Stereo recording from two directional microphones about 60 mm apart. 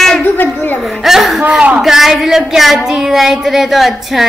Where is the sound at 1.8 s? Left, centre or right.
Centre.